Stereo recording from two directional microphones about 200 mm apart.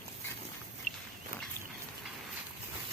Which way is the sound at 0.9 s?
40° left (ahead or behind).